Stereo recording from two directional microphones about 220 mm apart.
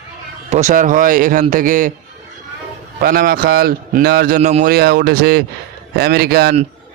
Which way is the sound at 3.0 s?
40° right (ahead or behind).